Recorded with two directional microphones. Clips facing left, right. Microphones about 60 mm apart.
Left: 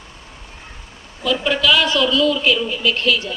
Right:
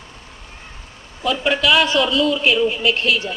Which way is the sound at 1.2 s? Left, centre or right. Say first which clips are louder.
Even; right.